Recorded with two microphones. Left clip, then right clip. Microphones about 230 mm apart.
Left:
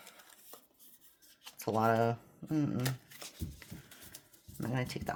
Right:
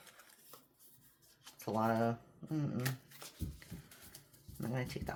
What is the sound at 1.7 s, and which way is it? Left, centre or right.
Speech, left.